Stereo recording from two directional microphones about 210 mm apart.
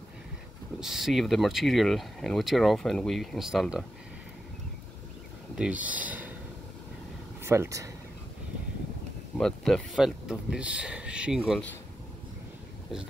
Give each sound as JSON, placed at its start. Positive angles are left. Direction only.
{"t": 0.7, "sound": "speech", "side_deg": 0}
{"t": 5.6, "sound": "speech", "side_deg": -5}
{"t": 7.4, "sound": "speech", "side_deg": -10}
{"t": 9.4, "sound": "speech", "side_deg": 5}